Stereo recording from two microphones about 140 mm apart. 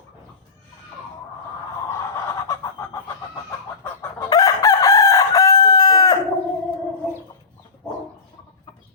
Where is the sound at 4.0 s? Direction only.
25° left (ahead or behind).